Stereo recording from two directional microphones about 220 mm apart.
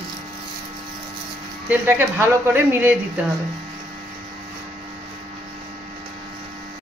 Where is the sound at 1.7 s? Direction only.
10° right (ahead or behind).